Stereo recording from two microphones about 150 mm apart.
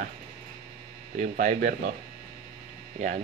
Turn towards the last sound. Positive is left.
turn(degrees=-50)  # may be behind; listen again after turning